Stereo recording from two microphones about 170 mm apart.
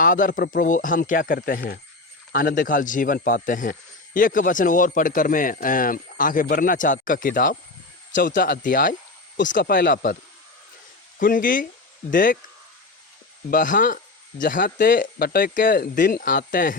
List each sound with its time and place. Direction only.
0.0 s speech: 55° left (ahead or behind)
11.2 s speech: 55° left (ahead or behind)
13.5 s speech: 50° left (ahead or behind)